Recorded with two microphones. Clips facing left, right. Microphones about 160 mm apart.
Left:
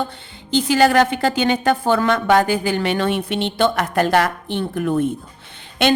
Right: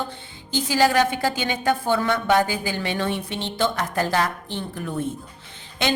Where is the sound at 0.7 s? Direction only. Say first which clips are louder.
Left 4 dB; 65° left (ahead or behind).